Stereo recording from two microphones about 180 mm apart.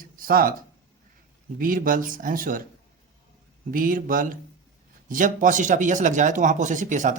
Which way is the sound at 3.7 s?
50° right (ahead or behind).